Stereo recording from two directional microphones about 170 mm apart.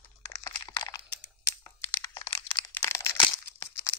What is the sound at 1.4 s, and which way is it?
Computer keyboard, 15° left (ahead or behind).